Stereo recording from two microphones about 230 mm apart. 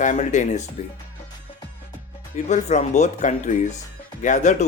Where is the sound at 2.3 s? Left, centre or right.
Left.